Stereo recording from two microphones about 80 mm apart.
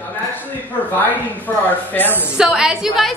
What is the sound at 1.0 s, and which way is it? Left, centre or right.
A woman's voice, left.